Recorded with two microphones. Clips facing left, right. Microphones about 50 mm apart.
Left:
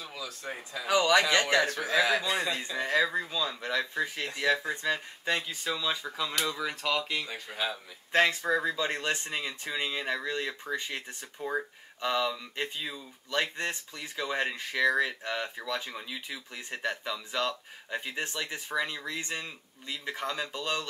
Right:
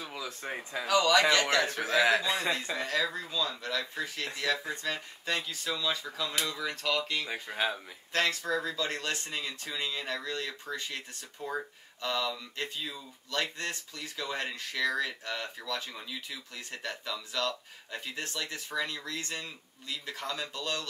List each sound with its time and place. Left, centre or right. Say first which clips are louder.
0.0 s speech: right 1 dB; right
0.8 s speech: even; centre
2.8 s speech: left 4 dB; centre
7.2 s speech: right 2 dB; centre
8.1 s speech: left 4 dB; left